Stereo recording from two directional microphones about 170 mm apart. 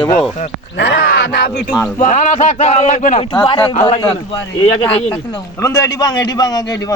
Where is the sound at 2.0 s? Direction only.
45° left (ahead or behind).